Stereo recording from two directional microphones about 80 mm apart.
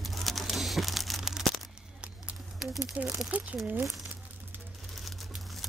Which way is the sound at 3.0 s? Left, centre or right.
Right.